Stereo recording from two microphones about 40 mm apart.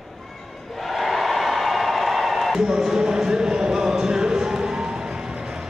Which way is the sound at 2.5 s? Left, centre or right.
Centre.